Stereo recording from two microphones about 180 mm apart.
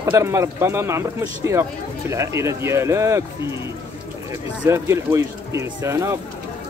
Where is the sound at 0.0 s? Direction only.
15° right (ahead or behind).